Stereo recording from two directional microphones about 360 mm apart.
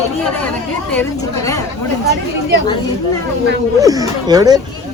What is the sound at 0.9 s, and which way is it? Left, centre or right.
Speech, centre.